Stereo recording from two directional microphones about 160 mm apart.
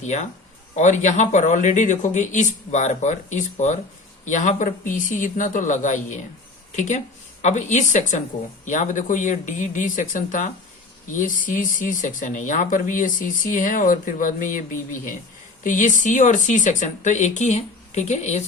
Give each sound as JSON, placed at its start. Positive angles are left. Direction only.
{"t": 0.0, "sound": "speech", "side_deg": 45}